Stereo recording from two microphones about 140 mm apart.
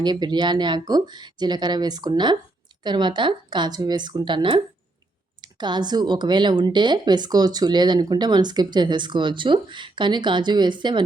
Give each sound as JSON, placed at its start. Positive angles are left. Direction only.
{"t": 0.0, "sound": "a woman's voice", "side_deg": -30}